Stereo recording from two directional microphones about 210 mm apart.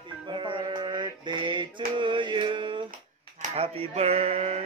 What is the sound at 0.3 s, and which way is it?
Music, 20° right (ahead or behind).